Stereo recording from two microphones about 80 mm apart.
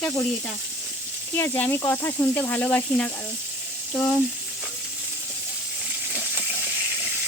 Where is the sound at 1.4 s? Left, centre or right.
Left.